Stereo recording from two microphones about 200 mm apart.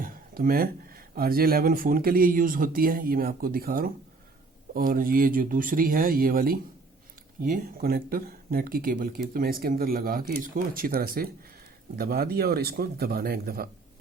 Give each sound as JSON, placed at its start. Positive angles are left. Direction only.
{"t": 0.0, "sound": "speech", "side_deg": -45}